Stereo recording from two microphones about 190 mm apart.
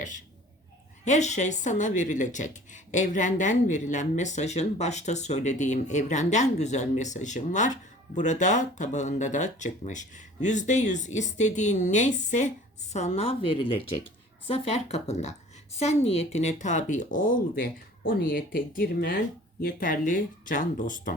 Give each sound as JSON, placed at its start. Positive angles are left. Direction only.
{"t": 1.0, "sound": "speech", "side_deg": 40}